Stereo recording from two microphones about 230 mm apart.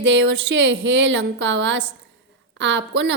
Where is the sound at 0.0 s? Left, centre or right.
Right.